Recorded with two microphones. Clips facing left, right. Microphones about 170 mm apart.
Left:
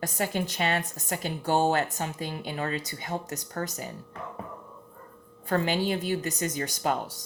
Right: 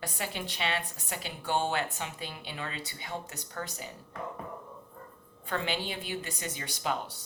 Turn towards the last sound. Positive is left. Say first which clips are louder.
# left 5 dB
turn(degrees=40)  # may be behind; listen again after turning